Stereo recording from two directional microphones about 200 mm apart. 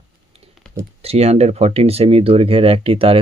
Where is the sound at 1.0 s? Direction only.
30° right (ahead or behind).